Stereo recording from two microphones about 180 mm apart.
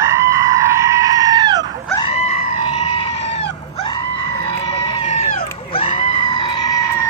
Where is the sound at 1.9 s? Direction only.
30° left (ahead or behind).